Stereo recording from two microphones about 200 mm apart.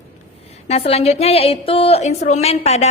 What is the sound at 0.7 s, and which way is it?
A woman's voice, 30° left (ahead or behind).